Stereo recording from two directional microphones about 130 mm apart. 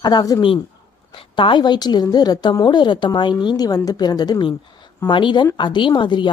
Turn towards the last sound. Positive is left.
turn(degrees=35)  # may be behind; listen again after turning